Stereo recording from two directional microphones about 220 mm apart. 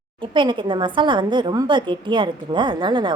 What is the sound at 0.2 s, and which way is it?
A woman's voice, 20° right (ahead or behind).